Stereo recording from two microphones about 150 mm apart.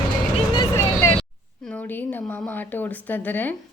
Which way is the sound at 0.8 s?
15° left (ahead or behind).